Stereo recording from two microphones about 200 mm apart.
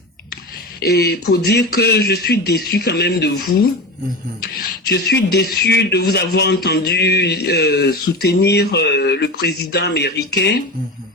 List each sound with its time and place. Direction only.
0.8 s speech: 50° left (ahead or behind)
4.6 s a man's voice: 50° left (ahead or behind)